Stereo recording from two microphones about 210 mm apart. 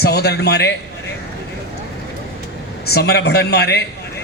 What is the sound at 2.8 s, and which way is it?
A man's voice, 50° left (ahead or behind).